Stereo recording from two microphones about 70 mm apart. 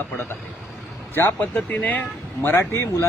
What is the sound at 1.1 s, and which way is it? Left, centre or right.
Speech, left.